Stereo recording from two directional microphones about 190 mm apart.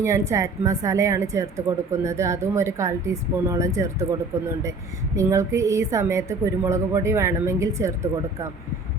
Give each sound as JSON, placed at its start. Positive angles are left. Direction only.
{"t": 0.0, "sound": "a woman's voice", "side_deg": -15}
{"t": 5.1, "sound": "a woman's voice", "side_deg": -15}